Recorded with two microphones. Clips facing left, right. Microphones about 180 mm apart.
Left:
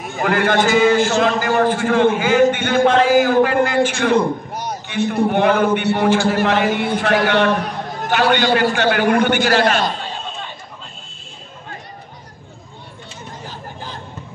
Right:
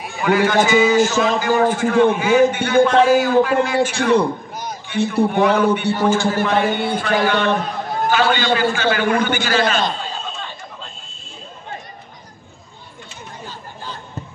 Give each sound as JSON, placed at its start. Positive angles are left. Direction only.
{"t": 0.0, "sound": "a man's voice", "side_deg": 50}